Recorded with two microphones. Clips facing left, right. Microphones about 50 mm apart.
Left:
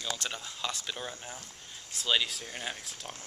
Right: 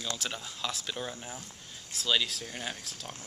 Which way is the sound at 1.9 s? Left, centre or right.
Centre.